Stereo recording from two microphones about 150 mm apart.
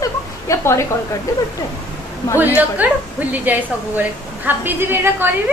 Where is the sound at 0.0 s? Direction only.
20° left (ahead or behind).